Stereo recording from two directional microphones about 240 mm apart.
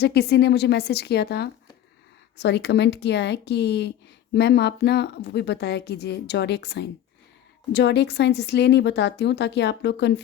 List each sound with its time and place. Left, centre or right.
0.0 s a woman's voice: left